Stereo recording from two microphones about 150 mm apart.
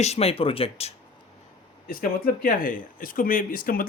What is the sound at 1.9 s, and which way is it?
Speech, 70° left (ahead or behind).